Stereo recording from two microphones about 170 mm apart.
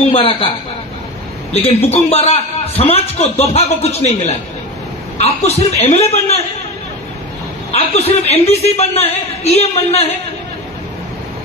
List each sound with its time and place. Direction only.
0.1 s a man's voice: 30° left (ahead or behind)
1.5 s a man's voice: 35° left (ahead or behind)
5.1 s a man's voice: 40° left (ahead or behind)
7.7 s a man's voice: 40° left (ahead or behind)